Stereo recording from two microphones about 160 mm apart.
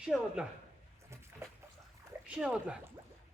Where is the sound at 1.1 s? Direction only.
15° right (ahead or behind).